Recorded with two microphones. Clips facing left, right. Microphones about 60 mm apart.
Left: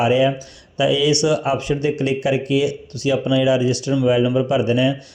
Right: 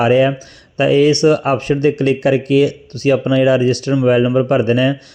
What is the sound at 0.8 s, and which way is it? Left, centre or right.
A man's voice, right.